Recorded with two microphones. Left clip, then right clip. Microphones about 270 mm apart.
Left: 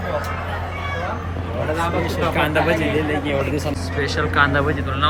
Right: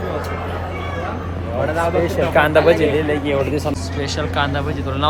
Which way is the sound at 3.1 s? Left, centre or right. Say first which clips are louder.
Right 3 dB; centre.